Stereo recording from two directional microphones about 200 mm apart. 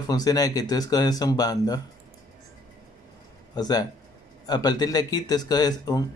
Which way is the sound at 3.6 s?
20° left (ahead or behind).